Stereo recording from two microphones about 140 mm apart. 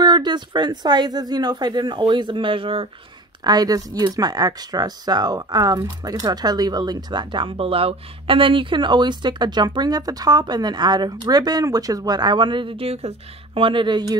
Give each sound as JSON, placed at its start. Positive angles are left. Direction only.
{"t": 0.0, "sound": "a woman's voice", "side_deg": -30}
{"t": 3.4, "sound": "a woman's voice", "side_deg": -30}